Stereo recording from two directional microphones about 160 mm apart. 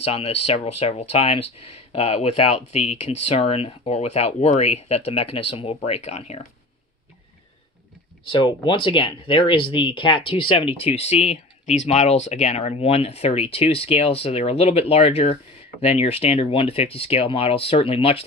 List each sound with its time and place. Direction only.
0.0 s speech: 40° left (ahead or behind)
8.3 s speech: 30° left (ahead or behind)